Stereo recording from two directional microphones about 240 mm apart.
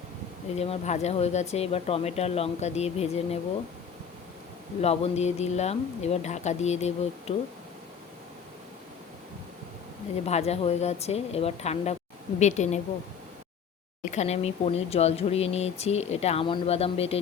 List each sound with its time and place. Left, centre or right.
0.5 s speech: left
4.8 s speech: left
10.2 s speech: left
14.0 s speech: left